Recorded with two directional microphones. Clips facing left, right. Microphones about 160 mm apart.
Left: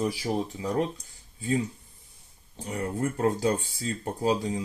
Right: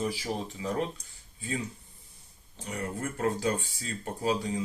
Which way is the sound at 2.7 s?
35° left (ahead or behind).